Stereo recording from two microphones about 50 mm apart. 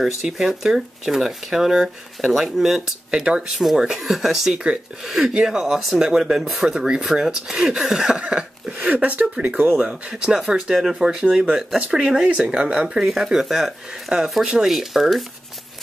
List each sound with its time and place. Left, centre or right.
0.0 s speech: centre
3.1 s speech: centre
8.2 s a sound: centre
8.7 s speech: right
9.8 s speech: centre